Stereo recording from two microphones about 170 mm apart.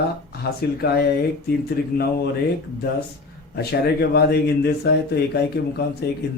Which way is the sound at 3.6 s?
70° left (ahead or behind).